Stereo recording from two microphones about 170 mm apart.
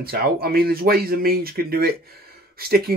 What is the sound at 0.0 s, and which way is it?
Speech, 65° right (ahead or behind).